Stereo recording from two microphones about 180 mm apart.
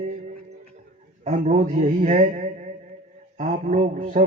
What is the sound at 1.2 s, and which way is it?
A man's voice, 40° right (ahead or behind).